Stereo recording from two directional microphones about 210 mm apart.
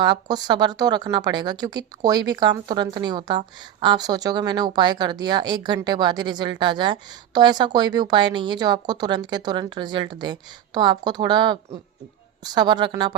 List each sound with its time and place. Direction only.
0.0 s speech: 20° right (ahead or behind)